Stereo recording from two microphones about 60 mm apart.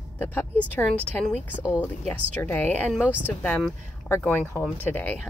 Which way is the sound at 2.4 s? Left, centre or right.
Left.